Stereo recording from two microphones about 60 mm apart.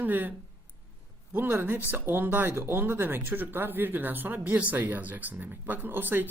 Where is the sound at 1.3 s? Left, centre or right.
Right.